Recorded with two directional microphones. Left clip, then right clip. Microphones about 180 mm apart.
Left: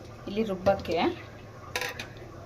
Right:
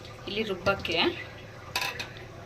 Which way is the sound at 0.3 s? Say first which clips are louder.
Left 2 dB; 45° left (ahead or behind).